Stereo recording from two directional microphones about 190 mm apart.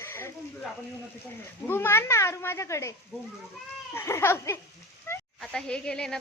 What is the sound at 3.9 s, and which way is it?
Speech, 15° left (ahead or behind).